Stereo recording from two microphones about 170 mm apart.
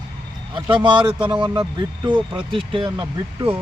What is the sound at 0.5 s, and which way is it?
Speech, 30° right (ahead or behind).